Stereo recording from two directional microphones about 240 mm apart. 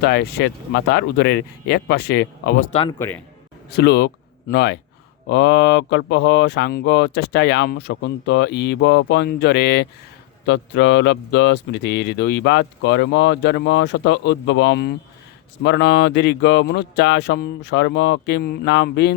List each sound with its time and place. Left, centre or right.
0.0 s speech: left
3.0 s a man's voice: centre
3.7 s speech: left